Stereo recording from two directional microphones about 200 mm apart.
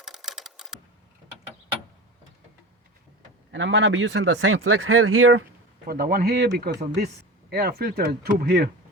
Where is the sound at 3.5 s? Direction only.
70° right (ahead or behind); by 5.4 s 90° right.